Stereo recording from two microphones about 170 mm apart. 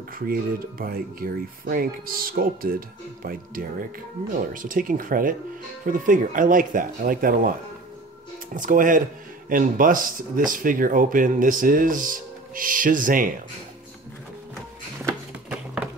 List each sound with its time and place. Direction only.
0.3 s speech: 60° right (ahead or behind)
8.5 s speech: 50° right (ahead or behind)